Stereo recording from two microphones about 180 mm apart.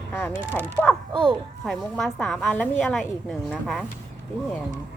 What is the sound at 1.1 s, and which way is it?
Speech, 30° right (ahead or behind).